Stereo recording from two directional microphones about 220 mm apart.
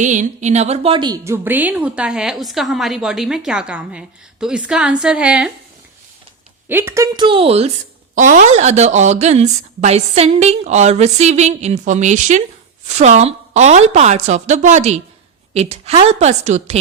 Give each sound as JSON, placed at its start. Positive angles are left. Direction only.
{"t": 0.0, "sound": "a woman's voice", "side_deg": -35}
{"t": 6.7, "sound": "a woman's voice", "side_deg": -10}